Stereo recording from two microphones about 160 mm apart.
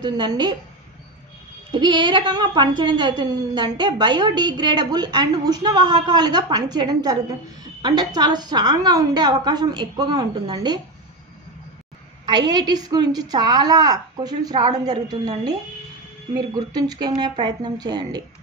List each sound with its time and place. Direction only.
0.0 s a woman's voice: 25° right (ahead or behind)
1.7 s a woman's voice: 30° right (ahead or behind)
12.3 s a woman's voice: 25° right (ahead or behind)